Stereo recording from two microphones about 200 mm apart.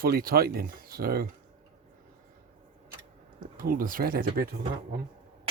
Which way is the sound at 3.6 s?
45° right (ahead or behind).